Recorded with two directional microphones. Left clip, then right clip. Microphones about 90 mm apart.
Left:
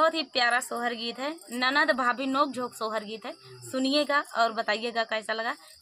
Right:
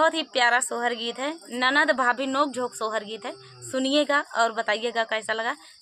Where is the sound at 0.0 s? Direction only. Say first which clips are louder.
Right 3 dB; 25° right (ahead or behind).